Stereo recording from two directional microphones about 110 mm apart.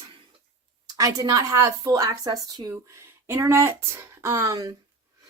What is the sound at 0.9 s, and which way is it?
Speech, 35° right (ahead or behind).